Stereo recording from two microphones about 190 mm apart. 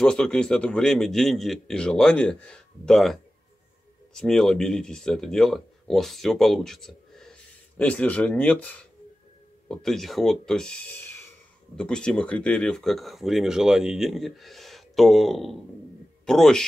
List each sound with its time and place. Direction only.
0.0 s speech: 5° left (ahead or behind)